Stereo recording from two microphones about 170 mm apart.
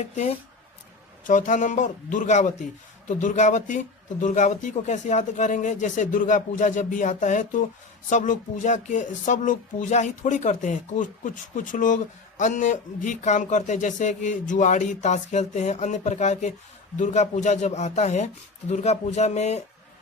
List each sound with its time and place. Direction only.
0.0 s speech: 40° left (ahead or behind)